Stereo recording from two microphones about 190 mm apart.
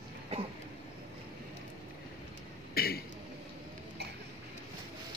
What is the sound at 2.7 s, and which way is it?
Throat clearing, 50° left (ahead or behind).